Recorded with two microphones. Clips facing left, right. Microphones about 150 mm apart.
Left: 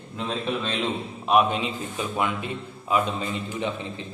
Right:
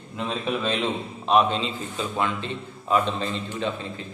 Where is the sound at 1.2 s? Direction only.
10° left (ahead or behind).